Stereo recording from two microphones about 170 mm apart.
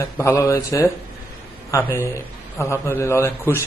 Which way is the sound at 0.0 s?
20° left (ahead or behind).